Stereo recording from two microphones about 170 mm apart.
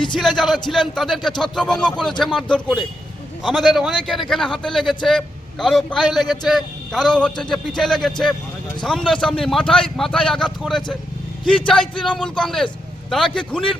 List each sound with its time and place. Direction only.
0.2 s a man's voice: centre (ahead or behind)